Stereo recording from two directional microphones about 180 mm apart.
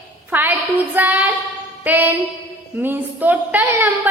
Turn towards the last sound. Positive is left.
turn(degrees=-10)  # may be behind; listen again after turning